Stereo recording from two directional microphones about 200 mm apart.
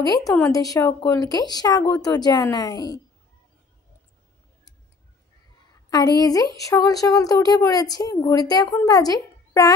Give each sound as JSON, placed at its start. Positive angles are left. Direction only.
{"t": 0.3, "sound": "speech", "side_deg": 15}
{"t": 5.9, "sound": "speech", "side_deg": 20}